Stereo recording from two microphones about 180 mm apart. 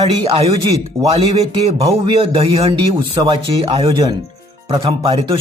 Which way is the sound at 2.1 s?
30° right (ahead or behind).